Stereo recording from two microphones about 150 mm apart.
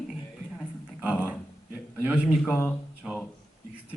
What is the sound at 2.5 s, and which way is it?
Speech, 10° left (ahead or behind).